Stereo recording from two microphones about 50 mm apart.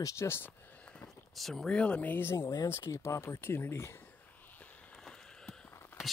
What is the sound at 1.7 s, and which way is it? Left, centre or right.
Speech, left.